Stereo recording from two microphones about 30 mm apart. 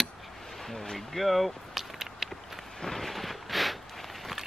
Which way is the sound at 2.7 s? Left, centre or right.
Centre.